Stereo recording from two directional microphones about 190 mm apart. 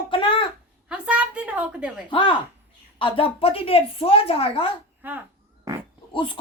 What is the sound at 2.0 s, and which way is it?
Speech, 25° left (ahead or behind).